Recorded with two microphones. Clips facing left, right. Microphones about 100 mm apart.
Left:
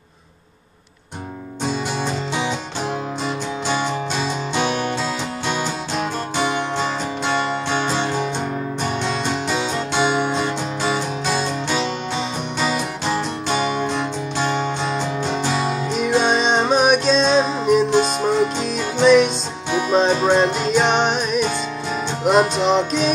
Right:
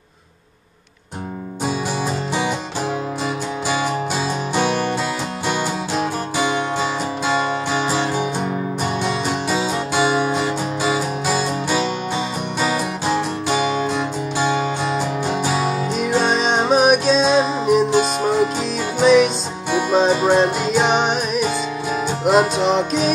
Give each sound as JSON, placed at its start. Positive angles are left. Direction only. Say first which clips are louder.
{"t": 3.6, "sound": "music", "louder": "right 1 dB", "side_deg": -5}
{"t": 5.5, "sound": "music", "louder": "right 3 dB", "side_deg": -5}